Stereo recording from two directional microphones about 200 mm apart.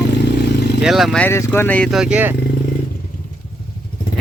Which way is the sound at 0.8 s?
Centre (ahead or behind).